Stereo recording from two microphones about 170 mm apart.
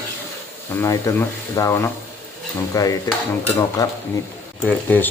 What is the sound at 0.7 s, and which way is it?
Speech, 15° left (ahead or behind).